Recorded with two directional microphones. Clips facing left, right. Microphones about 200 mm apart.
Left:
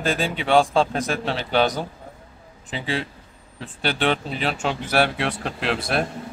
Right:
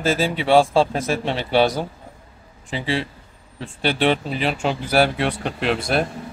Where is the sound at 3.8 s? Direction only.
Centre (ahead or behind).